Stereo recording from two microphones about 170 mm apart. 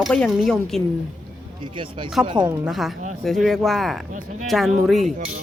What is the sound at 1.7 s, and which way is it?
Speech, 30° right (ahead or behind).